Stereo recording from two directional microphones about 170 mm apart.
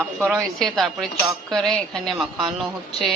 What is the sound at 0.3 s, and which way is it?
Speech, centre (ahead or behind).